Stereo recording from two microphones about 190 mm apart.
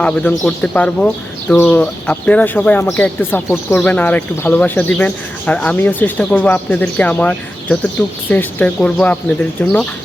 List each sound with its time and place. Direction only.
0.0 s speech: 5° left (ahead or behind)